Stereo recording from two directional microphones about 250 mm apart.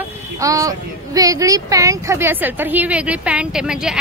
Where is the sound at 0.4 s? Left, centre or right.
Centre.